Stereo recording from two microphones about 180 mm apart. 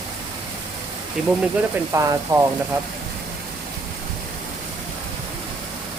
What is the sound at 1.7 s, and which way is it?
Speech, 15° right (ahead or behind).